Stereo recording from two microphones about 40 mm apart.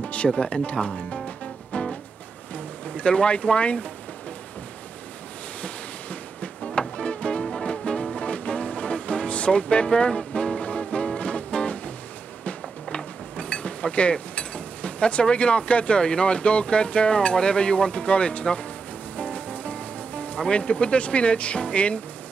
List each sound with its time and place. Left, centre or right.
0.0 s music: left
2.5 s a sound: left
5.6 s a sound: left
7.0 s music: left
12.9 s mechanisms: left
19.1 s music: left